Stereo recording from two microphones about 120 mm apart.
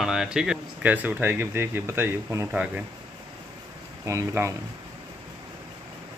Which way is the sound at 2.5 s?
10° right (ahead or behind).